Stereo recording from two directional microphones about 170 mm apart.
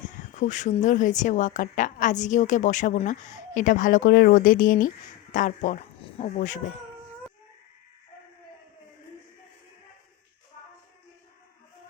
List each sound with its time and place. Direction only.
0.3 s a woman's voice: 45° left (ahead or behind)
6.0 s speech: 35° left (ahead or behind)